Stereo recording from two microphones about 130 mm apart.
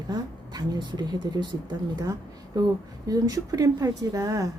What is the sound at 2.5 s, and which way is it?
Speech, 30° right (ahead or behind).